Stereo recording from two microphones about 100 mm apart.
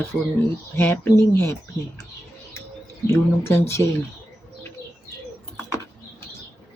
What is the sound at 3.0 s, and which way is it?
Speech, 25° left (ahead or behind).